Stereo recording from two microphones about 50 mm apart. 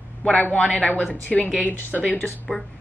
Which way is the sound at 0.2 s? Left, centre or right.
Left.